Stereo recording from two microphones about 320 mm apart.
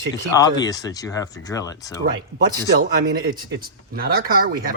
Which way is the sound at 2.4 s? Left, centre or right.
Right.